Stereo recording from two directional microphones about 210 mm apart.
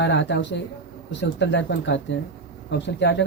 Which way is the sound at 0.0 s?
60° left (ahead or behind).